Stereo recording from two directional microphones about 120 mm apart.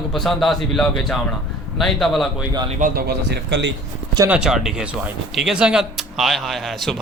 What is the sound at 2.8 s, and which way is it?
Speech, 90° right.